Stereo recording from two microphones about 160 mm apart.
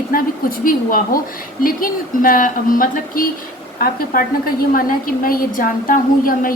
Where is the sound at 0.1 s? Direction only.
65° left (ahead or behind).